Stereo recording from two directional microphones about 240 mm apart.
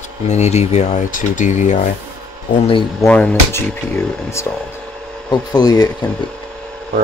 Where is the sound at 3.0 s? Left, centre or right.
Centre.